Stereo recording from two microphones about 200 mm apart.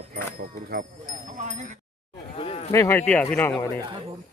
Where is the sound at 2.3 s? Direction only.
30° left (ahead or behind).